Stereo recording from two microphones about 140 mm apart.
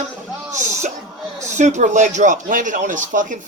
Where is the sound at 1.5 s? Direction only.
60° right (ahead or behind).